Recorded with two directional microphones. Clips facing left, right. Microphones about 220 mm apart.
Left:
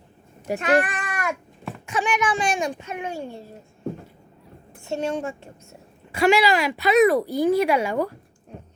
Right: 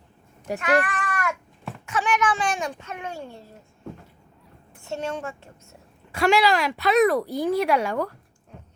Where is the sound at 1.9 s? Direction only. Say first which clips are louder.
Even; 15° left (ahead or behind).